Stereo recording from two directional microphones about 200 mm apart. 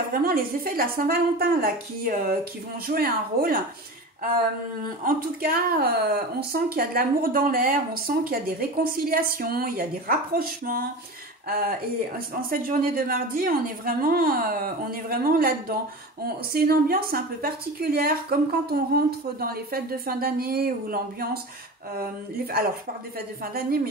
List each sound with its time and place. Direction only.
0.1 s a woman's voice: 45° right (ahead or behind)
5.0 s a woman's voice: 45° right (ahead or behind)
12.4 s a woman's voice: 45° right (ahead or behind)
16.5 s a woman's voice: 50° right (ahead or behind)